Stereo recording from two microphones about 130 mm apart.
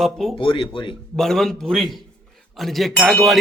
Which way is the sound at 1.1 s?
5° left (ahead or behind).